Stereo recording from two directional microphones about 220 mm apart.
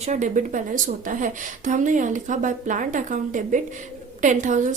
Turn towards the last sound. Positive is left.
turn(degrees=-35)  # may be behind; listen again after turning